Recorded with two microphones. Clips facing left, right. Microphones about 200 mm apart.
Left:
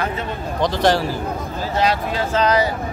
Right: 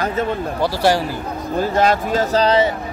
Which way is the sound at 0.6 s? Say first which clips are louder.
Even; 10° right (ahead or behind).